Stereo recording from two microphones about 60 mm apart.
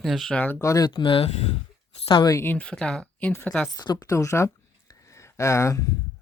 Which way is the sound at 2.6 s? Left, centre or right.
Centre.